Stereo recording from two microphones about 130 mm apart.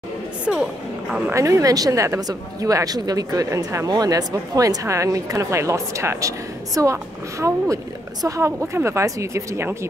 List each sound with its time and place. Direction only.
0.5 s speech: 5° right (ahead or behind)
1.3 s speech: 25° right (ahead or behind)